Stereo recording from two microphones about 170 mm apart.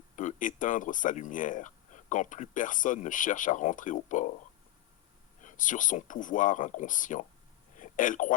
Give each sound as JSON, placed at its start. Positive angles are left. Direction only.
{"t": 0.2, "sound": "speech", "side_deg": 50}
{"t": 5.4, "sound": "speech", "side_deg": 50}
{"t": 7.8, "sound": "a sound", "side_deg": 50}